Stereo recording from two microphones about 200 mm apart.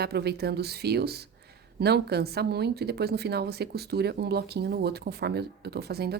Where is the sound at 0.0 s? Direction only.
55° right (ahead or behind).